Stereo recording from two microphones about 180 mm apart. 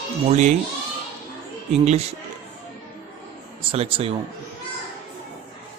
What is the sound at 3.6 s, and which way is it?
Speech, 30° right (ahead or behind).